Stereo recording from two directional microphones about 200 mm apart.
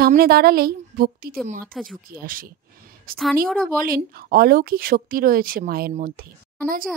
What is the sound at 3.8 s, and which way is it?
Speech, 45° right (ahead or behind).